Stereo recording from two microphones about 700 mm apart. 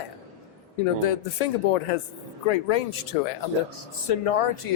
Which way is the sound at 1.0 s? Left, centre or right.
Left.